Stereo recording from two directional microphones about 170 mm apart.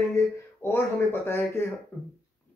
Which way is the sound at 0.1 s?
15° left (ahead or behind).